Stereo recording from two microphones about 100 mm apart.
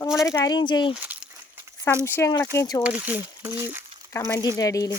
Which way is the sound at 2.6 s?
35° left (ahead or behind).